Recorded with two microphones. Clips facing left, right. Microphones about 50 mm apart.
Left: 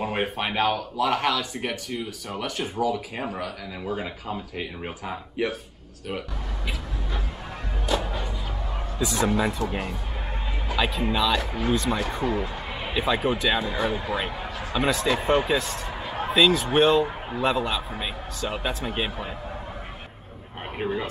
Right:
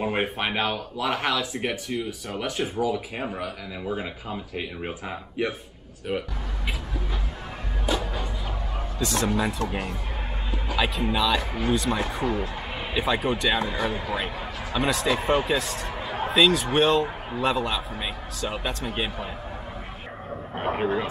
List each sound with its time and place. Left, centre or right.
0.0 s speech: centre
3.8 s speech: centre
8.0 s music: centre
8.9 s speech: centre
12.2 s speech: left
12.9 s speech: centre